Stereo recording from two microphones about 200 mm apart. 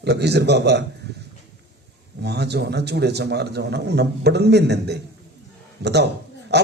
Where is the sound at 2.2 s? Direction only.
55° right (ahead or behind).